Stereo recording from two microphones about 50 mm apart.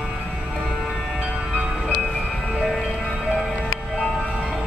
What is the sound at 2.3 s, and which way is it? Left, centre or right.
Music, centre.